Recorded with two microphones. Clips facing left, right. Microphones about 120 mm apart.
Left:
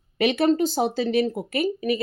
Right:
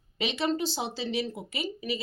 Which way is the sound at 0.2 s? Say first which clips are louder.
Left 9 dB; 55° left (ahead or behind).